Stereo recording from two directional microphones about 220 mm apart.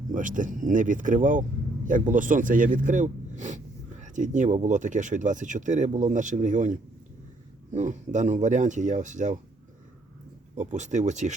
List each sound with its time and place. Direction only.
0.1 s speech: 35° right (ahead or behind)
10.5 s speech: 35° right (ahead or behind)